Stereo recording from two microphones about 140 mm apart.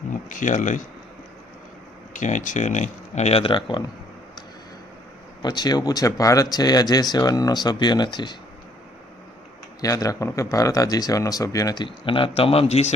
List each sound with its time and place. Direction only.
0.1 s speech: 65° left (ahead or behind)
2.1 s speech: 65° left (ahead or behind); by 3.8 s 35° left (ahead or behind)
5.4 s speech: 30° left (ahead or behind)
9.8 s speech: 25° left (ahead or behind); by 12.9 s 50° left (ahead or behind)